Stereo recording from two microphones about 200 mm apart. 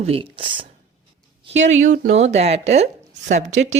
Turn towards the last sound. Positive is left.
turn(degrees=-35)  # may be behind; listen again after turning